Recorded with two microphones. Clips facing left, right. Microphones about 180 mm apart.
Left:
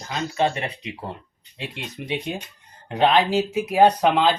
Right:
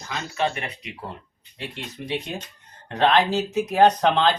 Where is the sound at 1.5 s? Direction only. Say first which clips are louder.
Left 1 dB; 15° left (ahead or behind).